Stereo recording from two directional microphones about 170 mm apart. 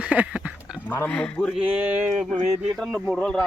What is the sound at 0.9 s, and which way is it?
Speech, 10° left (ahead or behind).